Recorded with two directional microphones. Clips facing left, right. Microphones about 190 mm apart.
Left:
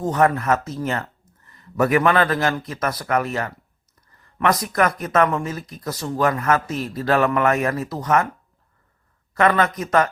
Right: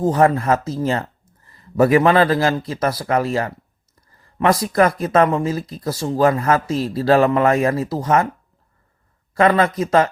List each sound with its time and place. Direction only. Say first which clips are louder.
0.0 s speech: right 3 dB; 30° right (ahead or behind)
9.3 s speech: right 3 dB; 30° right (ahead or behind)